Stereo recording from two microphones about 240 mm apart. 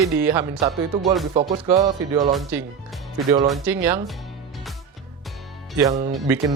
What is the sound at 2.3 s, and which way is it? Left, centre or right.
Speech, centre.